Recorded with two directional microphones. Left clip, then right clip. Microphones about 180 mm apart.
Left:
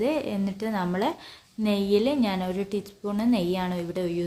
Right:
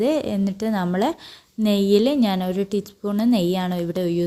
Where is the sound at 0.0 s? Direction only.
40° right (ahead or behind).